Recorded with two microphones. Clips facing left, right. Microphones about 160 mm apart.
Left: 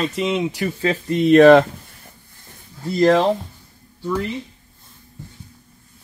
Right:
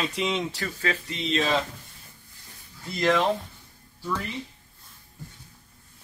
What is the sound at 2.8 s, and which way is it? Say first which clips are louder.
Speech: left 8 dB; 40° left (ahead or behind).